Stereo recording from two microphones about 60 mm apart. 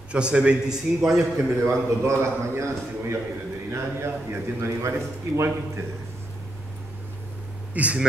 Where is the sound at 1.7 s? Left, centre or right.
Right.